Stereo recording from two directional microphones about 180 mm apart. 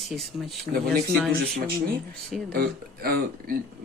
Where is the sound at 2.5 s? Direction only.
60° right (ahead or behind).